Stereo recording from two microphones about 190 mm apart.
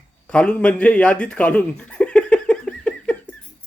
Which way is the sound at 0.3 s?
5° left (ahead or behind).